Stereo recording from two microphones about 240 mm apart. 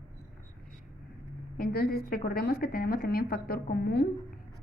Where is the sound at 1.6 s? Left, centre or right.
Left.